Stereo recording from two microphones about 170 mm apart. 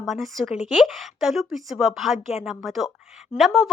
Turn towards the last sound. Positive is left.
turn(degrees=0)  # may be behind; listen again after turning